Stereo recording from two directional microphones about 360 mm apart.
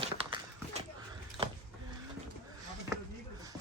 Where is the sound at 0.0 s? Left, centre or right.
Centre.